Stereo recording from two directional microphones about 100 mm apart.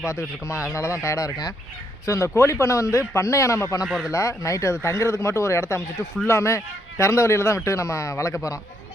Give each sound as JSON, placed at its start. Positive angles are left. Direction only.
{"t": 1.0, "sound": "speech", "side_deg": 35}
{"t": 3.8, "sound": "speech", "side_deg": -5}
{"t": 4.1, "sound": "speech", "side_deg": 30}